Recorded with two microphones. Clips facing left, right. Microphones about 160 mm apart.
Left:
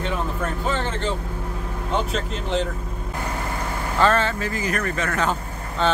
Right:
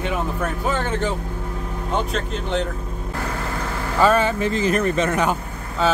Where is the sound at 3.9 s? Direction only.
10° right (ahead or behind).